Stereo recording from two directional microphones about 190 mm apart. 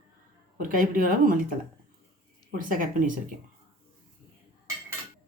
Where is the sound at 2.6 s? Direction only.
45° right (ahead or behind).